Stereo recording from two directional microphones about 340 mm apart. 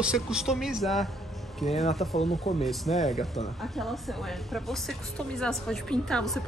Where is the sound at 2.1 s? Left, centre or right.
Centre.